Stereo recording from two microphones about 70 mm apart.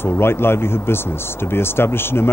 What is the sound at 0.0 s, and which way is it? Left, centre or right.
Speech, left.